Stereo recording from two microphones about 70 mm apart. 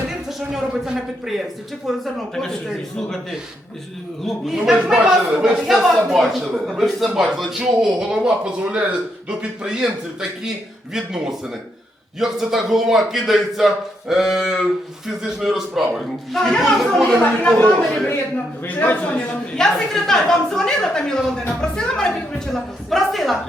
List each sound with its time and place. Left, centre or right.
0.3 s a man's voice: centre
4.2 s a man's voice: centre
4.5 s a man's voice: centre
17.7 s a woman's voice: centre
18.6 s a man's voice: left
19.5 s a woman's voice: centre